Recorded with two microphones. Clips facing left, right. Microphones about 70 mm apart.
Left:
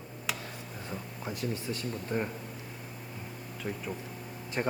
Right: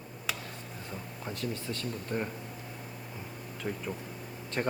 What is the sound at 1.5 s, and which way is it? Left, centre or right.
Speech, centre.